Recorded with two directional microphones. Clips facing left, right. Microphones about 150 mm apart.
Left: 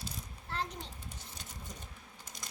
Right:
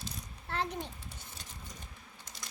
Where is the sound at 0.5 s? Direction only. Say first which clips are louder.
Right 4 dB; 60° right (ahead or behind).